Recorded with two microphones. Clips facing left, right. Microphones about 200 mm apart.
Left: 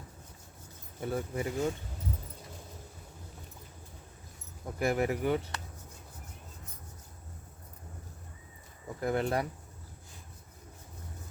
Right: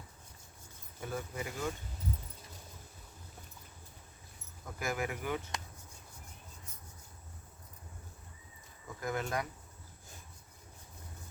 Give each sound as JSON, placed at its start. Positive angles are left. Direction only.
{"t": 1.1, "sound": "speech", "side_deg": 30}
{"t": 4.6, "sound": "speech", "side_deg": 35}
{"t": 9.0, "sound": "speech", "side_deg": 30}